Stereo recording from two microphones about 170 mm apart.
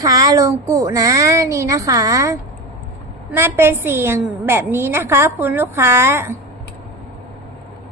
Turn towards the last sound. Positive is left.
turn(degrees=-15)  # may be behind; listen again after turning